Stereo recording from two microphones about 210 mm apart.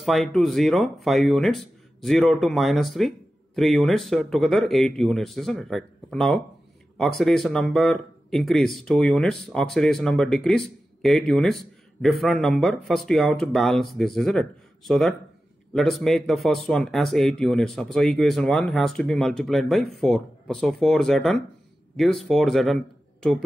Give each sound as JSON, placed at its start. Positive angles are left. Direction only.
{"t": 0.0, "sound": "speech", "side_deg": 0}